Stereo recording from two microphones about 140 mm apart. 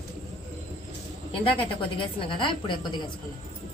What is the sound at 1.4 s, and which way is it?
A woman's voice, 40° left (ahead or behind).